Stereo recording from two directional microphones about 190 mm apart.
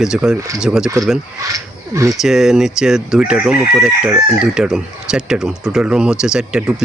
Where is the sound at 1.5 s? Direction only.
15° right (ahead or behind).